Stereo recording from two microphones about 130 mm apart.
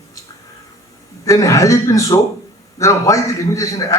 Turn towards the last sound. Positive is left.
turn(degrees=25)  # may be behind; listen again after turning